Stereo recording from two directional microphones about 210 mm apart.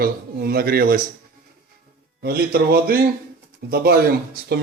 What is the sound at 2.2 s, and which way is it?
Speech, 45° right (ahead or behind).